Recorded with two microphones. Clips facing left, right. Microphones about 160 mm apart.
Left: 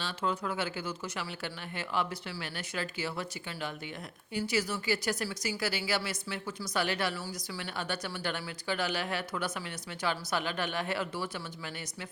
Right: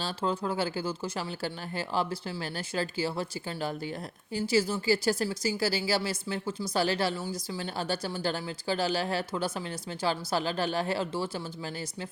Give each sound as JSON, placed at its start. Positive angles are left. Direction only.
{"t": 0.0, "sound": "a woman's voice", "side_deg": -30}